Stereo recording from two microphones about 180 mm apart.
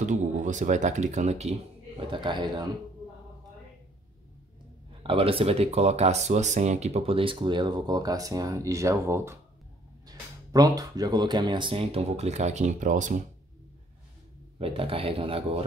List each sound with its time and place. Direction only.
0.0 s speech: 40° right (ahead or behind)
2.0 s speech: 25° right (ahead or behind)
5.0 s speech: 30° right (ahead or behind)
14.6 s speech: 30° right (ahead or behind)